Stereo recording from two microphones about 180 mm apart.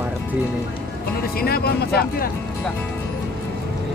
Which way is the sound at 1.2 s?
60° left (ahead or behind).